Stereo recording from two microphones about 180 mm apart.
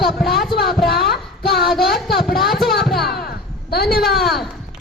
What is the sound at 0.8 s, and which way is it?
Child singing, 60° left (ahead or behind).